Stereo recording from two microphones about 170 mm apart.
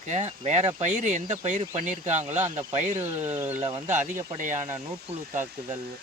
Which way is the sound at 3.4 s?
10° right (ahead or behind).